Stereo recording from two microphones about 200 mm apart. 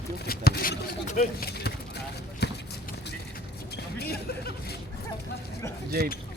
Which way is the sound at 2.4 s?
55° left (ahead or behind).